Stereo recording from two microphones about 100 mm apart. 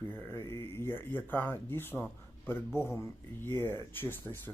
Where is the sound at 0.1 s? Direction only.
25° left (ahead or behind).